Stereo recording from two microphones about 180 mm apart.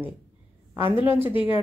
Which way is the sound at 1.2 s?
30° left (ahead or behind).